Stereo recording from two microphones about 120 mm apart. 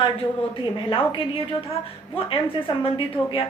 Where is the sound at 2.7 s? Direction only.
45° left (ahead or behind).